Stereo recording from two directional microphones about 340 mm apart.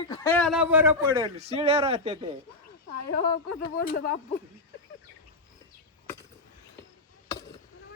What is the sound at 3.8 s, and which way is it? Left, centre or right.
Speech, left.